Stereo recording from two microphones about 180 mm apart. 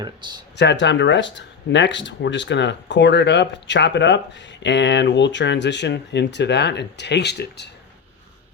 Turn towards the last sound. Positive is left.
turn(degrees=65)  # may be behind; listen again after turning